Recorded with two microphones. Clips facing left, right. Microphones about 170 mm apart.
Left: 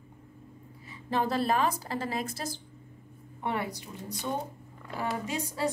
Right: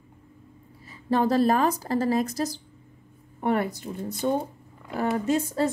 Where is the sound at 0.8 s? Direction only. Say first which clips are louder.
Right 7 dB; 40° right (ahead or behind).